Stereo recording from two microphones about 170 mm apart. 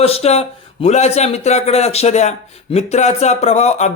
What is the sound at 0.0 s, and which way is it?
Speech, 35° left (ahead or behind).